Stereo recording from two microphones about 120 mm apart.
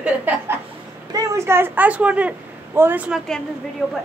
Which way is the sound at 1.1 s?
25° right (ahead or behind).